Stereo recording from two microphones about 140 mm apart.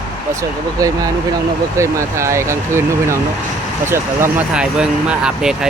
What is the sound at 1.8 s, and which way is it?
Speech, 20° right (ahead or behind).